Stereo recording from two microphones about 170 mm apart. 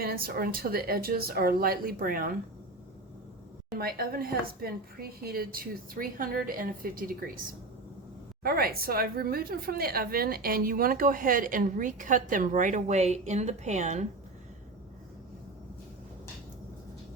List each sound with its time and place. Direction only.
0.0 s a woman's voice: 60° right (ahead or behind)
3.8 s a woman's voice: 60° right (ahead or behind)
8.4 s a woman's voice: 60° right (ahead or behind); by 14.0 s 40° right (ahead or behind)